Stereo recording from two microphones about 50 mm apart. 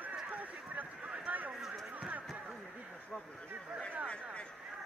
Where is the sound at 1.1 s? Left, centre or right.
Right.